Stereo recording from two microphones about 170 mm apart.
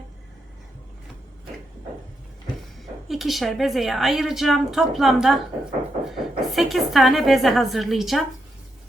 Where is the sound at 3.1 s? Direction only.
Centre (ahead or behind).